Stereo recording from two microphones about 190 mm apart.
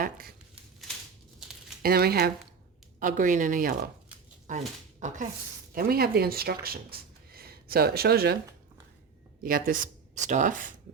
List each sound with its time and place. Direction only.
0.0 s a sound: 50° right (ahead or behind)
1.8 s speech: 55° right (ahead or behind)
3.0 s speech: 45° right (ahead or behind)
5.7 s speech: 50° right (ahead or behind)
7.3 s a sound: 55° right (ahead or behind)
9.4 s speech: 50° right (ahead or behind)